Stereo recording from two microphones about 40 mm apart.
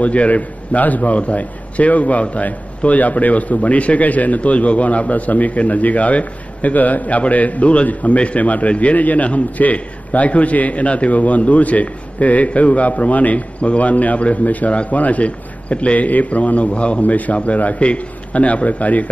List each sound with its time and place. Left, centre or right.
0.0 s a man's voice: left